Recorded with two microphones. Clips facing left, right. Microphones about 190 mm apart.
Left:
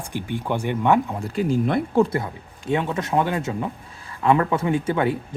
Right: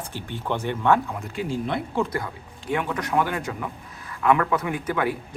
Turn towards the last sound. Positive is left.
turn(degrees=25)  # may be behind; listen again after turning